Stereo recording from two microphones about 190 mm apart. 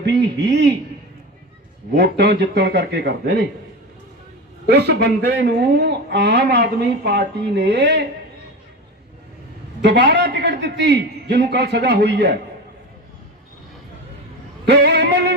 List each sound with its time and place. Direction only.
0.0 s a sound: 65° right (ahead or behind)
2.0 s speech: 60° right (ahead or behind)
4.6 s speech: 60° right (ahead or behind)
9.8 s speech: 65° right (ahead or behind)
14.6 s music: 65° right (ahead or behind)